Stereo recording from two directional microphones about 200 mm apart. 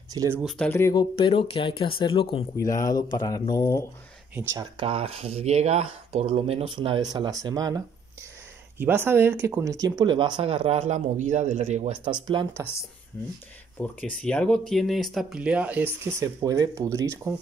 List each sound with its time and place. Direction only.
0.1 s speech: 15° right (ahead or behind)
0.4 s speech: 5° left (ahead or behind)
1.1 s speech: 25° left (ahead or behind)
4.4 s speech: 20° right (ahead or behind)
13.1 s speech: 10° left (ahead or behind); by 17.3 s 15° right (ahead or behind)